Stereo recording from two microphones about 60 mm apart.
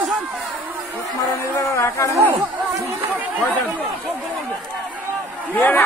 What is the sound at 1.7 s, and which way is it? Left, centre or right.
Speech, left.